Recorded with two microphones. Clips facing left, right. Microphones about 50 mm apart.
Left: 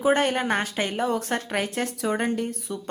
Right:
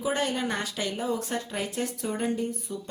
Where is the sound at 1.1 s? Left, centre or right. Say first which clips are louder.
Left 4 dB; left.